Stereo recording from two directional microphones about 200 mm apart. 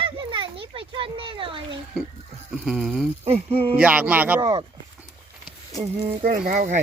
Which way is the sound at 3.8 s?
5° right (ahead or behind).